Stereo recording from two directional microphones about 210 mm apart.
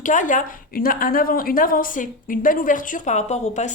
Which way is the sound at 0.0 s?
35° left (ahead or behind).